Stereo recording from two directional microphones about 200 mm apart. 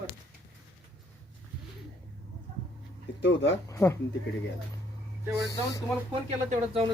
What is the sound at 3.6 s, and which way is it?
Speech, 15° left (ahead or behind).